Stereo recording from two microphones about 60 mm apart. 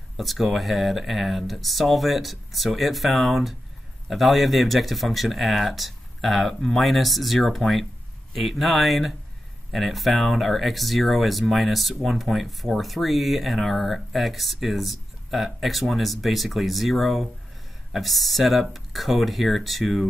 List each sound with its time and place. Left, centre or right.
0.2 s speech: centre